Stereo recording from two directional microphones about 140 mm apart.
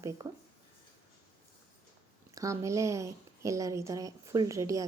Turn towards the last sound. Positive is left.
turn(degrees=-25)  # may be behind; listen again after turning